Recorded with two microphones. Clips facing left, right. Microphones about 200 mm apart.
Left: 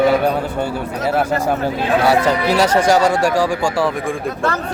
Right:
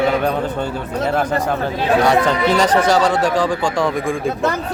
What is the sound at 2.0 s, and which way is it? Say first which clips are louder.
Speech: left 1 dB; 5° left (ahead or behind).